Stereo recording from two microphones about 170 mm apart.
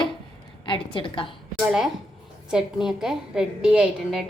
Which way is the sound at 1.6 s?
5° right (ahead or behind).